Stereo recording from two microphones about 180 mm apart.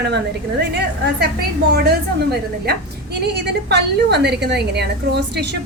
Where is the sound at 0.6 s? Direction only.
70° right (ahead or behind).